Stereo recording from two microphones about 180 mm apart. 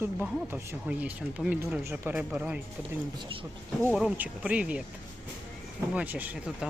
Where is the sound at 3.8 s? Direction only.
5° right (ahead or behind).